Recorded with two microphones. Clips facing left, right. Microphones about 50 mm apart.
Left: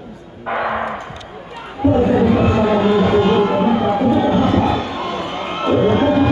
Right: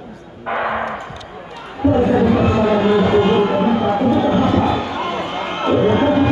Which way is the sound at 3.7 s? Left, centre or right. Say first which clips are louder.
Even; centre.